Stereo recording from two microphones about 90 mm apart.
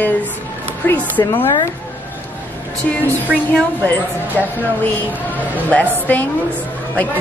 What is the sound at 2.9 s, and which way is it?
Speech, 15° left (ahead or behind).